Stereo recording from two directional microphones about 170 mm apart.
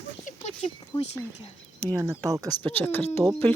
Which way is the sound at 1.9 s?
20° right (ahead or behind).